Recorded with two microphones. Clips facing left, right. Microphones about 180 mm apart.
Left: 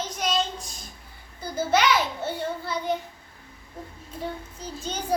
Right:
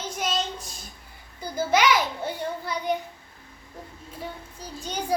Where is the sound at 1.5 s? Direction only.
10° right (ahead or behind).